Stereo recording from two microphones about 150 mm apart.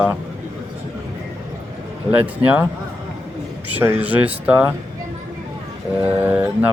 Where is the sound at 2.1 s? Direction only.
10° right (ahead or behind).